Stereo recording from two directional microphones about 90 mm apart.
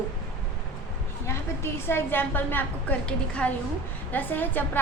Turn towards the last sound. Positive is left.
turn(degrees=20)  # may be behind; listen again after turning